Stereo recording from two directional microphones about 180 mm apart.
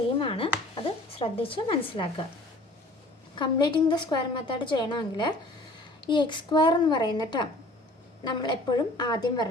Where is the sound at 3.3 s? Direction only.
25° left (ahead or behind).